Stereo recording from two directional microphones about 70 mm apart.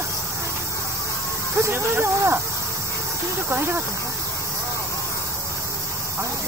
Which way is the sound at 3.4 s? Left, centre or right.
Right.